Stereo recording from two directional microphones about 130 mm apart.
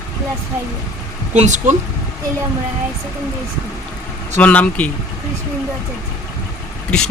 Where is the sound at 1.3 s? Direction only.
65° right (ahead or behind).